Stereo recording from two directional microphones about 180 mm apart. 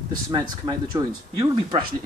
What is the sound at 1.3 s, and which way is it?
Speech, 30° right (ahead or behind).